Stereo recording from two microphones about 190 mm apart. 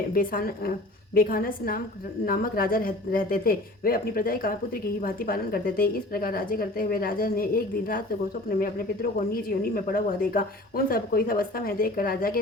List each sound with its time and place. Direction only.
0.1 s speech: 50° left (ahead or behind)